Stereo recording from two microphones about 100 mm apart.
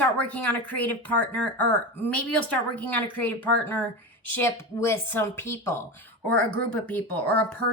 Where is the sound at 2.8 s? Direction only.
15° left (ahead or behind).